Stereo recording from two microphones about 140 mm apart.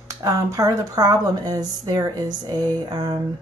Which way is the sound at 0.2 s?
25° right (ahead or behind).